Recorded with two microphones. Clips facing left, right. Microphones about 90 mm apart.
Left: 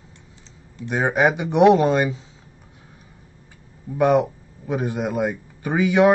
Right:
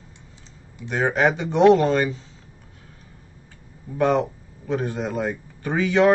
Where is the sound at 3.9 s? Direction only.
15° left (ahead or behind).